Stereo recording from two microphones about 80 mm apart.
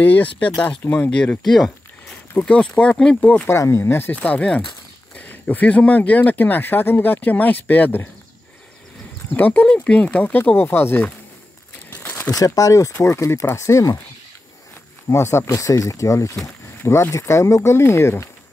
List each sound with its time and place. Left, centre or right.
0.0 s speech: left
3.2 s speech: left
3.5 s speech: left
4.1 s speech: centre
9.3 s speech: left
11.9 s crumpling: left
12.3 s speech: left
15.0 s speech: left